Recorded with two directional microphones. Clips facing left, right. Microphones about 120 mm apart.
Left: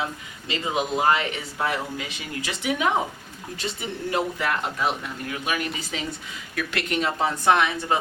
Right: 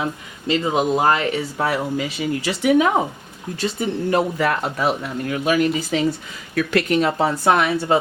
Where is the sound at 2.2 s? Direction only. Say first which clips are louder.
Right 10 dB; 40° right (ahead or behind).